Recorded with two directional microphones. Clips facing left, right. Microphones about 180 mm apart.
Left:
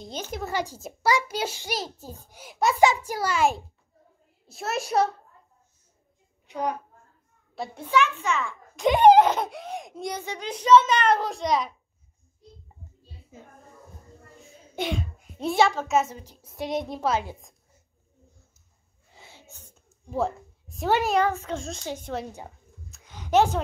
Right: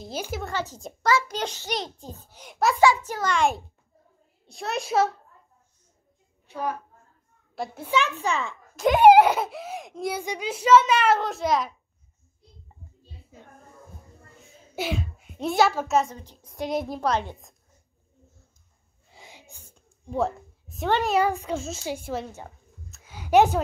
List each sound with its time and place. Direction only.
0.0 s a child's voice: 5° right (ahead or behind)
0.5 s a child's voice: 10° left (ahead or behind)
6.4 s a child's voice: 15° left (ahead or behind)
7.5 s a child's voice: centre (ahead or behind)
8.0 s a child's voice: 35° right (ahead or behind)
8.7 s a child's voice: centre (ahead or behind)
14.4 s a sound: 5° right (ahead or behind)
16.0 s a child's voice: 10° left (ahead or behind)
19.1 s sneeze: 15° right (ahead or behind)
19.7 s a sound: centre (ahead or behind)
21.2 s a child's voice: 10° right (ahead or behind)
22.8 s a sound: 5° right (ahead or behind)